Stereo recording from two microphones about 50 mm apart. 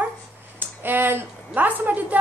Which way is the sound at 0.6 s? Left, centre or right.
Right.